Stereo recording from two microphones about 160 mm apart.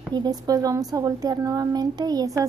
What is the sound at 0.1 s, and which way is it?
A child's voice, 25° right (ahead or behind).